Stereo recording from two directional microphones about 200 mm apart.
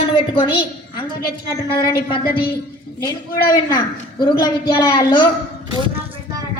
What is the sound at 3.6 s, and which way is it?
A man's voice, 20° left (ahead or behind).